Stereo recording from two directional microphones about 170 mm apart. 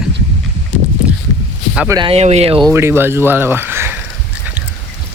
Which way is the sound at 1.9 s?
30° right (ahead or behind).